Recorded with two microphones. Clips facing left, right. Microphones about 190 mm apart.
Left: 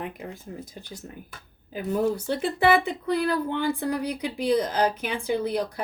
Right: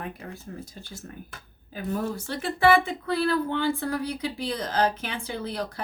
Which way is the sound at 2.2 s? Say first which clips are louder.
Even; 20° left (ahead or behind).